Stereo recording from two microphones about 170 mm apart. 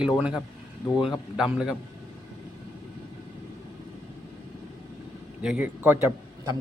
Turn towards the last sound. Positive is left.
turn(degrees=-15)  # may be behind; listen again after turning